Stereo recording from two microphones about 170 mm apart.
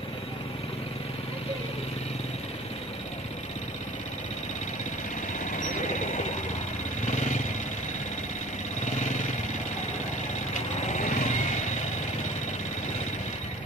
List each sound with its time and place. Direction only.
5.6 s a sound: 45° left (ahead or behind)
7.1 s vehicle: 45° left (ahead or behind)
8.8 s vehicle: 45° left (ahead or behind)
10.5 s vehicle: 45° left (ahead or behind)